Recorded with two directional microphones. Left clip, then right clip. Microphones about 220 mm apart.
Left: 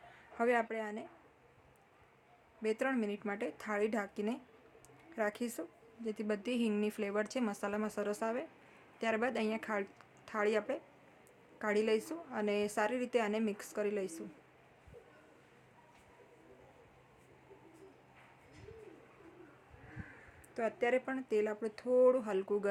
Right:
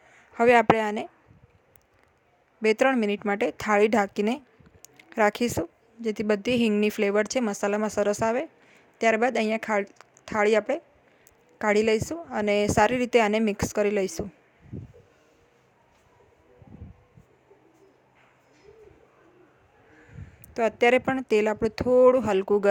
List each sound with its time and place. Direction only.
0.1 s speech: 40° right (ahead or behind)
2.6 s a woman's voice: 40° right (ahead or behind)
20.5 s a woman's voice: 40° right (ahead or behind)